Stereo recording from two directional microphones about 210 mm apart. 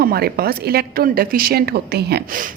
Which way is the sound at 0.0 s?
45° right (ahead or behind).